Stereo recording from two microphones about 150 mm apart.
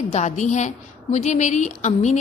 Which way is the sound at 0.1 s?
50° left (ahead or behind).